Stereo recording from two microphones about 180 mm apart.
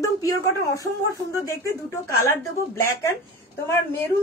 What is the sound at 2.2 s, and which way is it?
Speech, 15° left (ahead or behind).